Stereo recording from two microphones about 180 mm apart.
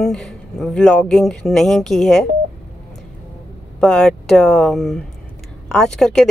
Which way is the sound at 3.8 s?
5° left (ahead or behind).